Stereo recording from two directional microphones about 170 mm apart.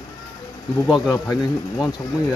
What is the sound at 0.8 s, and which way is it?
Speech, 20° left (ahead or behind).